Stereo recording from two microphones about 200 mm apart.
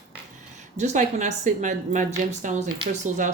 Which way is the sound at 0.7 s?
35° right (ahead or behind).